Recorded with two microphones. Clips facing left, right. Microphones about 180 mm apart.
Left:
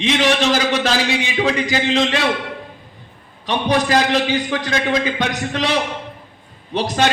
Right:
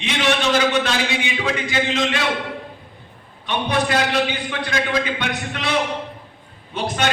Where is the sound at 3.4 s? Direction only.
35° left (ahead or behind).